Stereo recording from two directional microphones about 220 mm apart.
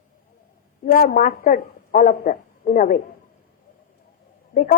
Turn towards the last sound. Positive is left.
turn(degrees=35)  # may be behind; listen again after turning